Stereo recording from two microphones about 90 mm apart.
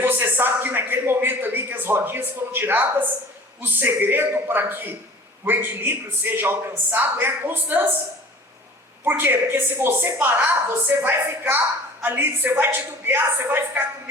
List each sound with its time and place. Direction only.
0.0 s a sound: 25° right (ahead or behind)
3.6 s a woman's voice: 20° right (ahead or behind)
9.0 s a woman's voice: 25° right (ahead or behind)